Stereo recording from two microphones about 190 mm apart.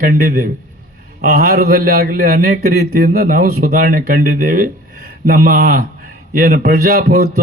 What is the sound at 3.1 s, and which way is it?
Speech, 45° right (ahead or behind).